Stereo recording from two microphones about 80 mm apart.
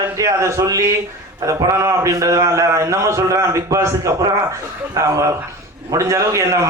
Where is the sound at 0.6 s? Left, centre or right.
Right.